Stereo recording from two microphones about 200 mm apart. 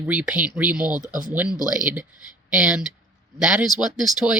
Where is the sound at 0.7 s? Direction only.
20° left (ahead or behind).